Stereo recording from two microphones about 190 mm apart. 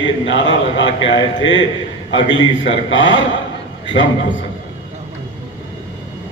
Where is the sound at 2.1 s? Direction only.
75° left (ahead or behind).